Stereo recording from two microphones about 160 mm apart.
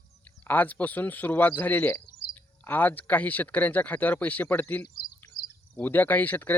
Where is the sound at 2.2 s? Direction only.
60° left (ahead or behind).